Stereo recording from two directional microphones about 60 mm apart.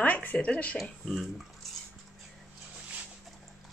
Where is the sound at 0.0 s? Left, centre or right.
Left.